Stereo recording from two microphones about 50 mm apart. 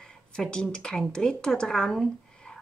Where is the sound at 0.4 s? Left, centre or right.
Centre.